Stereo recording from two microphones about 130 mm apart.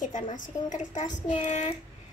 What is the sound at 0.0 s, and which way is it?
A woman's voice, 70° left (ahead or behind).